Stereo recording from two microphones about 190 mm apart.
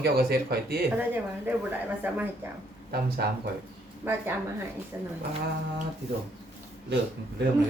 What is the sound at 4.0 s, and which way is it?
Speech, 10° right (ahead or behind).